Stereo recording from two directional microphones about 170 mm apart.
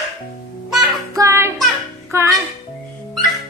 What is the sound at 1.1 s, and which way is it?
Music, 20° right (ahead or behind).